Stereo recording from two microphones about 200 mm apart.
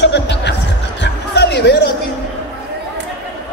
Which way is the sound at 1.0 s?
60° left (ahead or behind).